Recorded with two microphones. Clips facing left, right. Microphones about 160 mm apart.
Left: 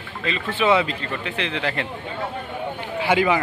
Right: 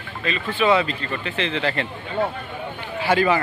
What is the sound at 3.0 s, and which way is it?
Speech, 15° left (ahead or behind).